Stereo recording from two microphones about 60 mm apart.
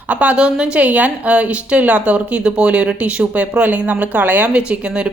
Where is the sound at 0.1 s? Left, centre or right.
Right.